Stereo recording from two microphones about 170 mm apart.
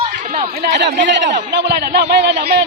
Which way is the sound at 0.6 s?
85° right.